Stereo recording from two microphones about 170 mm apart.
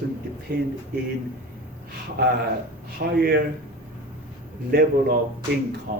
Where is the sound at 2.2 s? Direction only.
65° right (ahead or behind).